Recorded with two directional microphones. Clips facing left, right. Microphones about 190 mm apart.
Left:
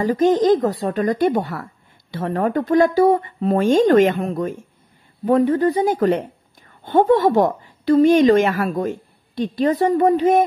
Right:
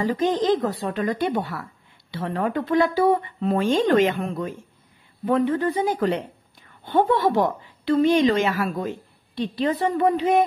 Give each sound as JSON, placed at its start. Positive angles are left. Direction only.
{"t": 0.0, "sound": "a woman's voice", "side_deg": 45}